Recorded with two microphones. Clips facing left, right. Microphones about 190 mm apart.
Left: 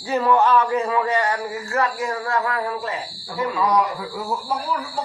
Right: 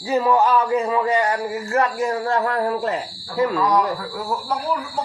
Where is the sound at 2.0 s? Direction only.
35° right (ahead or behind).